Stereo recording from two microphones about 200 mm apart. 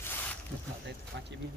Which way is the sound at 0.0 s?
10° left (ahead or behind).